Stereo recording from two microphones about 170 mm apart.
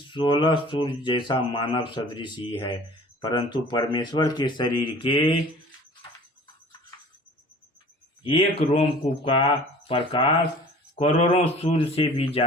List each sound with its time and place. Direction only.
0.1 s speech: 30° left (ahead or behind)
8.2 s speech: 35° left (ahead or behind)